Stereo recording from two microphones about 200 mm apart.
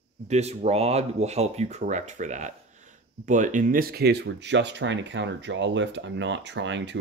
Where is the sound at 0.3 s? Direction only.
35° right (ahead or behind).